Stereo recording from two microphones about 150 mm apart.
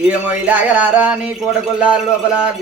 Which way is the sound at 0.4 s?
10° right (ahead or behind).